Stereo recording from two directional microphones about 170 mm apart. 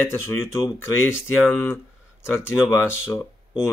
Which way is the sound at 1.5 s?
10° left (ahead or behind).